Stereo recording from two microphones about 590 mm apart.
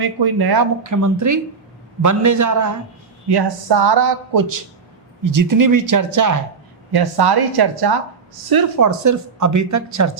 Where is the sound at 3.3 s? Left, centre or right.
Right.